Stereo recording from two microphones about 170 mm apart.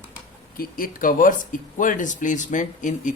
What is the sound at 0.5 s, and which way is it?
A man's voice, 55° left (ahead or behind).